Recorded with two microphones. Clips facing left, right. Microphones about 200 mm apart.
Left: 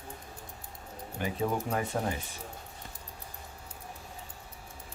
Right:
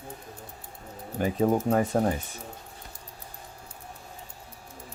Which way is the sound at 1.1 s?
45° right (ahead or behind).